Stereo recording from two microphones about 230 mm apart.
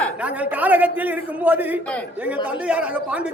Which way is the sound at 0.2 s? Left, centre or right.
Centre.